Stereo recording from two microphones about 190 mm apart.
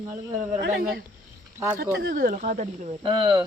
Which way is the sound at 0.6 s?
55° right (ahead or behind).